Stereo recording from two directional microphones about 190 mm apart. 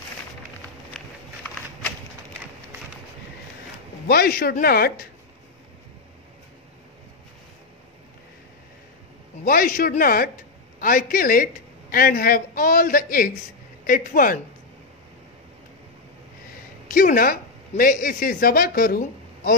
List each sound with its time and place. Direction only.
1.0 s a sound: 5° left (ahead or behind)
4.1 s a man's voice: 55° left (ahead or behind)
9.4 s a man's voice: 50° left (ahead or behind)
16.9 s a woman's voice: 45° left (ahead or behind)